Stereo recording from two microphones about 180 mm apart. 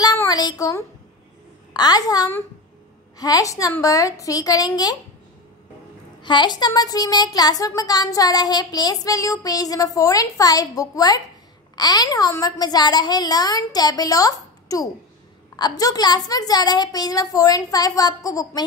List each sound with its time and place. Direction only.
0.0 s child singing: 20° left (ahead or behind)
1.7 s speech: 20° left (ahead or behind)
6.2 s speech: 25° left (ahead or behind)